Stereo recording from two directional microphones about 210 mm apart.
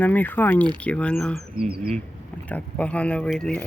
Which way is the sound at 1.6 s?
30° right (ahead or behind).